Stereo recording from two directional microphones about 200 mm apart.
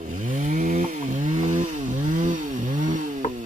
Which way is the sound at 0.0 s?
40° right (ahead or behind).